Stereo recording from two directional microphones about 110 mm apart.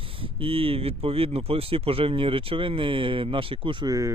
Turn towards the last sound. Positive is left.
turn(degrees=-30)  # may be behind; listen again after turning